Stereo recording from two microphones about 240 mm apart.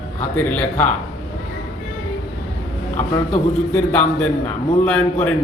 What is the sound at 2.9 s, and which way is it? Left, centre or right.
Speech, left.